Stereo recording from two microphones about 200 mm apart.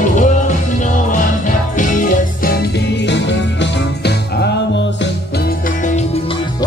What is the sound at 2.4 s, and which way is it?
Music, 60° left (ahead or behind).